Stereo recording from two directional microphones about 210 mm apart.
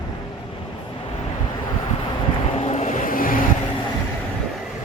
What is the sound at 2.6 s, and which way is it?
Vehicle, 30° left (ahead or behind).